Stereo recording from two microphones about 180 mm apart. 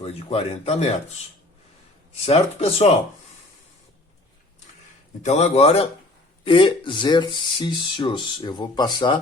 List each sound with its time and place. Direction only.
0.0 s speech: 35° left (ahead or behind)
2.2 s speech: 35° left (ahead or behind)
5.2 s speech: 40° left (ahead or behind); by 9.1 s 25° left (ahead or behind)